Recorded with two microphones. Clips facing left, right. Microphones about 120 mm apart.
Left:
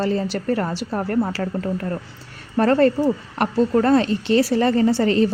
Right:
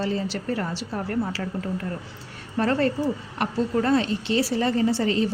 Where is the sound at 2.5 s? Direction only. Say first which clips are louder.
Left 6 dB; 50° left (ahead or behind).